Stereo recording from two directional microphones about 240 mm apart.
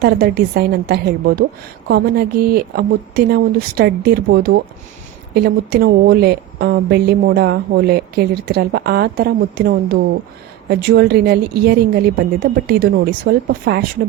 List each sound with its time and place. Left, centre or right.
0.0 s a woman's voice: right